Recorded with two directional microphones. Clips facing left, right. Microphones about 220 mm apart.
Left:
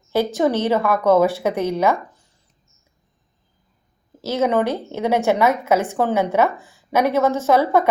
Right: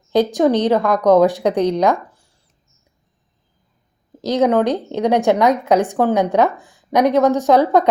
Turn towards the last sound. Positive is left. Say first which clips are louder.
# right 3 dB
turn(degrees=-15)  # may be behind; listen again after turning